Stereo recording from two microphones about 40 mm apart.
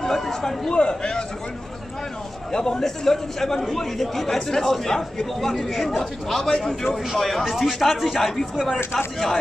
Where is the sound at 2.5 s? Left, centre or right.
Centre.